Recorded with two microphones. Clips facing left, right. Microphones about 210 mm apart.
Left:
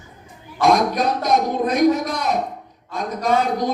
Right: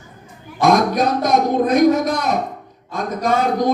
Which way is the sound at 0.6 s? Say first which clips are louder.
Right 2 dB; 50° right (ahead or behind).